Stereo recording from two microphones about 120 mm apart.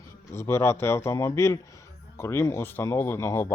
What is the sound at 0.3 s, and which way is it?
Speech, 20° left (ahead or behind).